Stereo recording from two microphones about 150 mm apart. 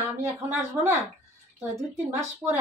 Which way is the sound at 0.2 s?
20° right (ahead or behind).